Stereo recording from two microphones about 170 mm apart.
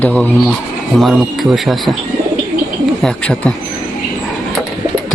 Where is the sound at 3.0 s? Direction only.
5° left (ahead or behind).